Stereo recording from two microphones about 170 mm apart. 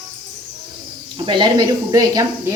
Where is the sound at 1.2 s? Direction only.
25° right (ahead or behind).